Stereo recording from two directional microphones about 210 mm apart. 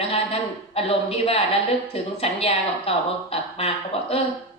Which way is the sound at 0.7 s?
30° left (ahead or behind).